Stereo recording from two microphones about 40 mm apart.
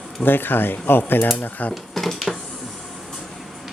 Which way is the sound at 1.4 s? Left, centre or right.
Left.